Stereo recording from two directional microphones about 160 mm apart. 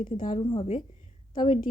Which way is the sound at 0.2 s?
30° left (ahead or behind).